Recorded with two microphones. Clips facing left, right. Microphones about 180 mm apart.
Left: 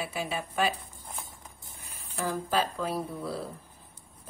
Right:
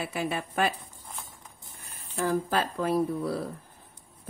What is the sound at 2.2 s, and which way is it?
Speech, 55° right (ahead or behind).